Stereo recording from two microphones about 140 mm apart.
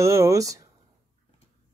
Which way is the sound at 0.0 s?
20° right (ahead or behind).